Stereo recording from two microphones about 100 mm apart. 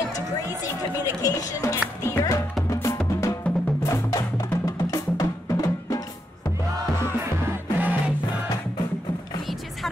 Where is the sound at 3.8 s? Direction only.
30° left (ahead or behind).